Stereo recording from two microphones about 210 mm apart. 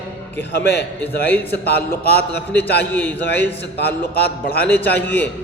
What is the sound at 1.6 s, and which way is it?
Speech, 50° left (ahead or behind).